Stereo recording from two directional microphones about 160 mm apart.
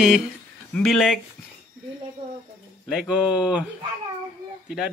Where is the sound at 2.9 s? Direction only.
5° right (ahead or behind).